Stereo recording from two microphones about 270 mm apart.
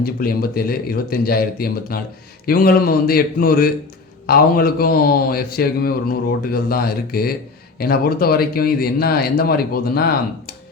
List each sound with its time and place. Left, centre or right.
0.0 s a man's voice: left